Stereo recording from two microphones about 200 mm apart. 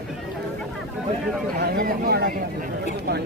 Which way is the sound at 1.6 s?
55° right (ahead or behind).